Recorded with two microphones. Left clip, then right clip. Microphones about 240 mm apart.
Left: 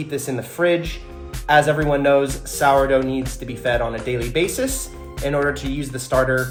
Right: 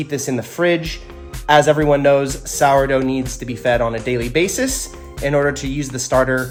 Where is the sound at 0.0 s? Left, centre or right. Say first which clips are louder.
Right 3 dB; right.